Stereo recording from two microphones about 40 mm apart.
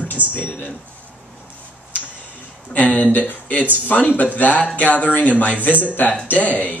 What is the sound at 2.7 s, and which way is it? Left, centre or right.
Speech, left.